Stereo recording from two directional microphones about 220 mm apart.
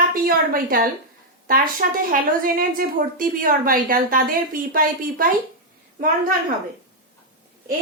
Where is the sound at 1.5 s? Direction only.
40° right (ahead or behind).